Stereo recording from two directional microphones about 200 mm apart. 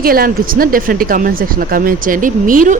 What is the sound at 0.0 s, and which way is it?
Speech, 45° right (ahead or behind).